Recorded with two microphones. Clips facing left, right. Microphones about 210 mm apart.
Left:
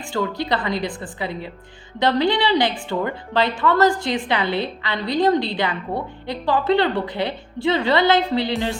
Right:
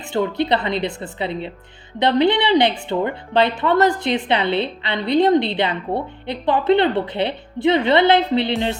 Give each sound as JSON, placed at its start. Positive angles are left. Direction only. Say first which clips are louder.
{"t": 0.1, "sound": "a woman's voice", "louder": "right 4 dB", "side_deg": -20}